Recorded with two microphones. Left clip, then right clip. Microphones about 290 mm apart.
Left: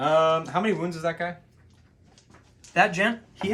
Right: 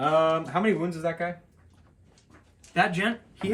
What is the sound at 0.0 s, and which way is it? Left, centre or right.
Speech, centre.